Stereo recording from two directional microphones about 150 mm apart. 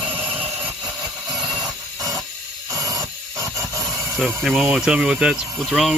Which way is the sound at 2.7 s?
20° right (ahead or behind).